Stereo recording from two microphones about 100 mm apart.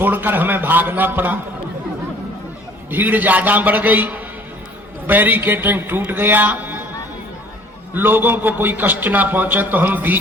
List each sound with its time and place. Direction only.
0.0 s a sound: 20° right (ahead or behind)
2.9 s a man's voice: 15° right (ahead or behind)
7.9 s a man's voice: 20° right (ahead or behind)